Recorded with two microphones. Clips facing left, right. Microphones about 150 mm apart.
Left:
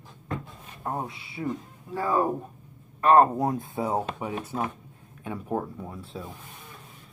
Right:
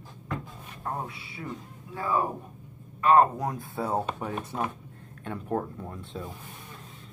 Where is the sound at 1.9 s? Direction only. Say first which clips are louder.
Left 3 dB; 40° left (ahead or behind).